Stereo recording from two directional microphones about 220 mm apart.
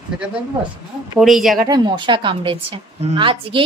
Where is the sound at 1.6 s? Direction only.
20° right (ahead or behind).